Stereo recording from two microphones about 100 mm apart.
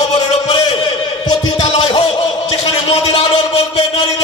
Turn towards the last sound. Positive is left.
turn(degrees=70)  # may be behind; listen again after turning